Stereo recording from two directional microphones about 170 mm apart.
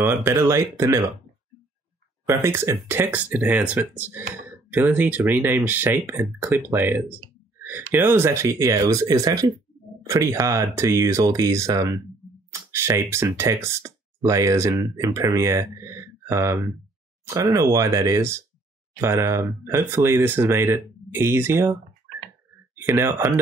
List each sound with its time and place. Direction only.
0.0 s speech: 15° right (ahead or behind)
2.2 s speech: 15° right (ahead or behind)
22.8 s speech: 15° right (ahead or behind)